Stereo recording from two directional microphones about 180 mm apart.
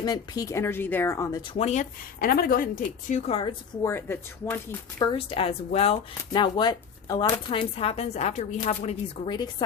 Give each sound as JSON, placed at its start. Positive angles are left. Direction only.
{"t": 0.0, "sound": "speech", "side_deg": 20}
{"t": 1.5, "sound": "speech", "side_deg": 40}
{"t": 3.1, "sound": "speech", "side_deg": 40}
{"t": 3.8, "sound": "speech", "side_deg": 15}
{"t": 5.0, "sound": "speech", "side_deg": 30}